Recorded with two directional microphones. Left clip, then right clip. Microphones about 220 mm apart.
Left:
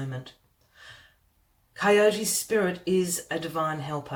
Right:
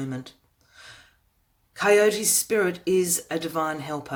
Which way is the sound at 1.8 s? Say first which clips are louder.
Right 2 dB; 45° right (ahead or behind).